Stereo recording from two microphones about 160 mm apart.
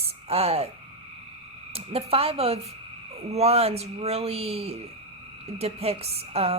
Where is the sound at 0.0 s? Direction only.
40° right (ahead or behind).